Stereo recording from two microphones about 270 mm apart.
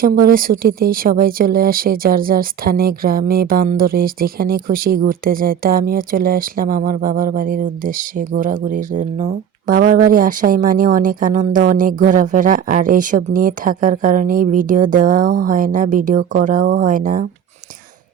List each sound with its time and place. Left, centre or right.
0.0 s speech: right